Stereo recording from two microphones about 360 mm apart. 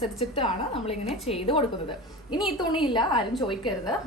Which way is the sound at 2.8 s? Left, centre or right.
Centre.